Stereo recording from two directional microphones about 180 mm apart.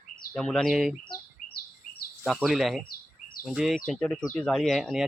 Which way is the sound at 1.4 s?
50° left (ahead or behind).